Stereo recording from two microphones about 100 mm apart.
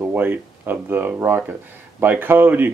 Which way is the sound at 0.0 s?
20° right (ahead or behind).